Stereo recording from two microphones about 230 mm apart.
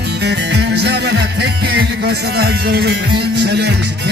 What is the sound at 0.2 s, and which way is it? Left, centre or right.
Music, right.